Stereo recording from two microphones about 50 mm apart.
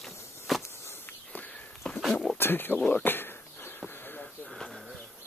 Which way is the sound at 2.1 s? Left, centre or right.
Centre.